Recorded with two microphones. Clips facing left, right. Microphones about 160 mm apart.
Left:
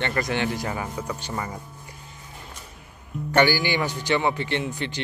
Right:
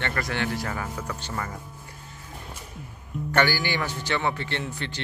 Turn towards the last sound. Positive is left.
turn(degrees=15)  # may be behind; listen again after turning